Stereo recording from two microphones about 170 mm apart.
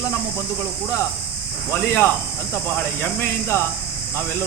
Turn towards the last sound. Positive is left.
turn(degrees=15)  # may be behind; listen again after turning